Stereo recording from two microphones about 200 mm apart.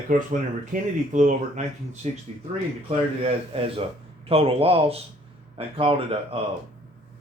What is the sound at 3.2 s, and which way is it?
Speech, 30° right (ahead or behind).